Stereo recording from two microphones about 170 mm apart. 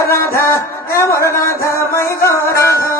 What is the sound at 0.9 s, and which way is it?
Music, 15° left (ahead or behind).